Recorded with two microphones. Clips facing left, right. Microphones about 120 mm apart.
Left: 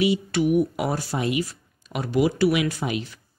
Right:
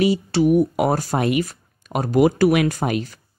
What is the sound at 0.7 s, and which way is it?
Speech, 50° right (ahead or behind).